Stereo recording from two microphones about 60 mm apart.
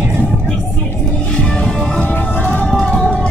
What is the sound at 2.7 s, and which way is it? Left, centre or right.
Music, centre.